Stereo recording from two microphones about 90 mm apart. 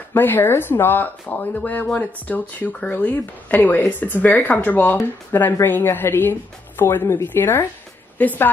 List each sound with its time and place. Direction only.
0.1 s speech: 25° left (ahead or behind)